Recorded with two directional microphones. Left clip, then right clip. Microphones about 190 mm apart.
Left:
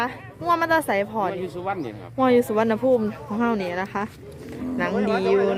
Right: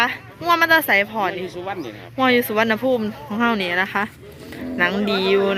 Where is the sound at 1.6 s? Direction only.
65° left (ahead or behind).